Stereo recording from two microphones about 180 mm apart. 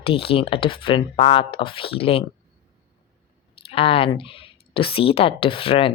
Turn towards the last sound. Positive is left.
turn(degrees=30)  # may be behind; listen again after turning